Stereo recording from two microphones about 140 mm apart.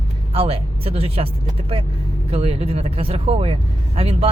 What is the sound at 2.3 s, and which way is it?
Speech, 45° right (ahead or behind).